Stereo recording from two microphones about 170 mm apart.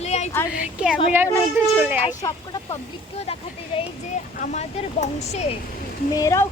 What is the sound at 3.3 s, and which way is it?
Speech, 35° left (ahead or behind).